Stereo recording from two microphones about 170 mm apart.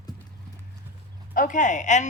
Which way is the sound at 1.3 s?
50° left (ahead or behind).